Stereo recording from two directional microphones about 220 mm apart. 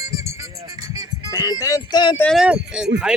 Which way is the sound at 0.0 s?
15° right (ahead or behind).